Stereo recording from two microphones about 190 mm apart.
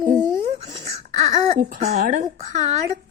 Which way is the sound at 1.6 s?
45° right (ahead or behind).